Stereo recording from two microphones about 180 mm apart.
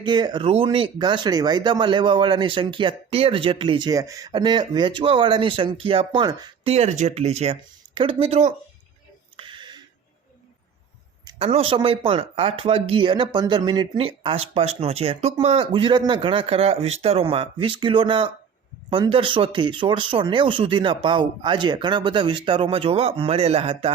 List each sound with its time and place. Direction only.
0.0 s speech: 25° right (ahead or behind)
6.7 s speech: 40° right (ahead or behind)
9.4 s a sound: 25° right (ahead or behind)
11.3 s speech: 35° right (ahead or behind)